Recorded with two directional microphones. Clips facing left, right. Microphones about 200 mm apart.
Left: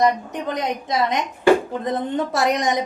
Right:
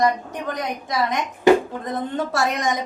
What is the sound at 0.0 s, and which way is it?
A woman's voice, 20° left (ahead or behind).